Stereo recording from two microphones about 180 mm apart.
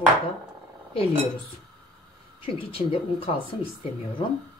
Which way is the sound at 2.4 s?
30° left (ahead or behind).